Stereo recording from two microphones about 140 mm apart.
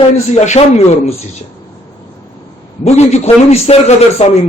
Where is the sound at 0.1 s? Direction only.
55° left (ahead or behind).